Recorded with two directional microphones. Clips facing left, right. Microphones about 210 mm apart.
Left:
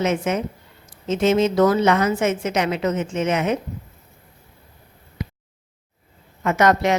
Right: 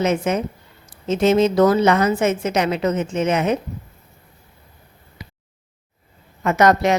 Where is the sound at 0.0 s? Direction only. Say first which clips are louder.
Right 2 dB; 35° right (ahead or behind).